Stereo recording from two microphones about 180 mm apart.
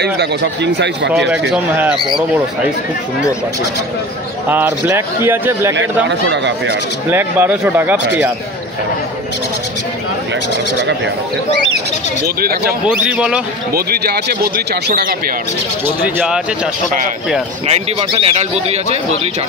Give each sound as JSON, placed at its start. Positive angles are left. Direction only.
{"t": 0.0, "sound": "speech", "side_deg": -70}
{"t": 1.5, "sound": "speech", "side_deg": -5}
{"t": 4.5, "sound": "speech", "side_deg": -10}
{"t": 6.0, "sound": "speech", "side_deg": -80}
{"t": 7.1, "sound": "speech", "side_deg": -10}
{"t": 12.8, "sound": "speech", "side_deg": -5}
{"t": 13.7, "sound": "a man's voice", "side_deg": -60}
{"t": 15.8, "sound": "speech", "side_deg": -10}
{"t": 17.6, "sound": "a man's voice", "side_deg": -35}